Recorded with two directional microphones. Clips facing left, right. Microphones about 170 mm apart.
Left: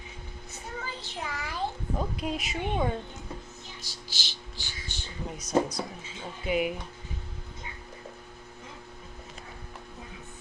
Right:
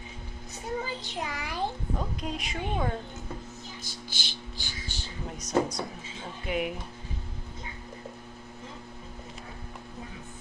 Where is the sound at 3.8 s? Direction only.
50° right (ahead or behind).